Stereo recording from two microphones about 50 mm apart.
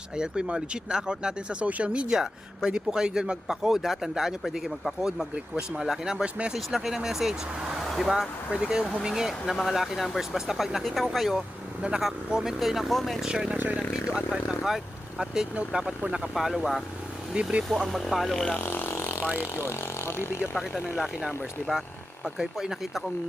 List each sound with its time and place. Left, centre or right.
0.2 s speech: centre
6.2 s speech: right
6.7 s speech: centre
7.9 s vehicle: centre
8.1 s speech: centre
11.8 s speech: centre
13.2 s speech: centre
13.5 s speech: right
14.2 s speech: centre
16.3 s speech: centre
17.6 s speech: centre
18.6 s vehicle: left
19.4 s speech: left
20.9 s speech: centre